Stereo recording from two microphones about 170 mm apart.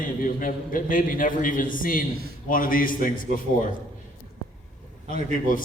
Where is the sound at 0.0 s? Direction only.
55° left (ahead or behind).